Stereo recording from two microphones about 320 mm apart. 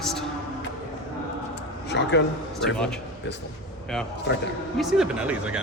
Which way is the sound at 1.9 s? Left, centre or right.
Left.